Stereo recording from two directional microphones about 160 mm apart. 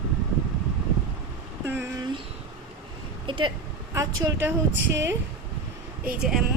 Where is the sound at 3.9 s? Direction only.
20° right (ahead or behind).